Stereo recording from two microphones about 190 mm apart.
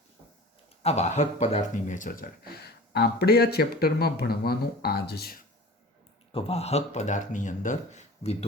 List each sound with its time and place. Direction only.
0.8 s speech: 35° left (ahead or behind); by 5.4 s 55° left (ahead or behind)
6.3 s speech: 35° left (ahead or behind)